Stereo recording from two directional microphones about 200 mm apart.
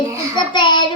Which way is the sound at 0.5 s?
25° left (ahead or behind).